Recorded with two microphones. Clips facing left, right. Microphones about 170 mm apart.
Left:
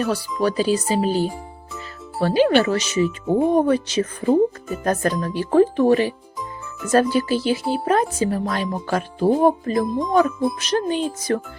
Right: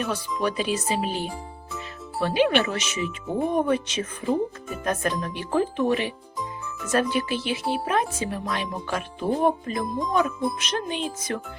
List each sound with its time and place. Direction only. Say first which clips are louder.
0.4 s speech: left 6 dB; 35° left (ahead or behind)